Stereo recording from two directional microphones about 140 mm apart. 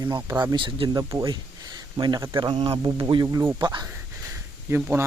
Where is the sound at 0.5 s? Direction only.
35° right (ahead or behind).